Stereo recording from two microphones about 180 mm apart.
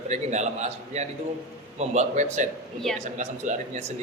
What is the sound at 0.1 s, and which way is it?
Speech, 40° right (ahead or behind).